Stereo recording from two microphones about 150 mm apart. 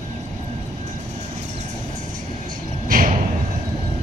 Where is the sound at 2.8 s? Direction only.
65° right (ahead or behind).